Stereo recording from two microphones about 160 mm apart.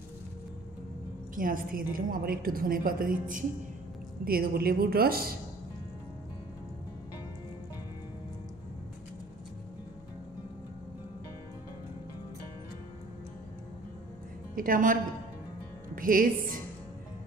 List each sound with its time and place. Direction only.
1.3 s a woman's voice: 60° right (ahead or behind)
4.2 s a woman's voice: 70° right (ahead or behind)
14.5 s a woman's voice: 60° right (ahead or behind)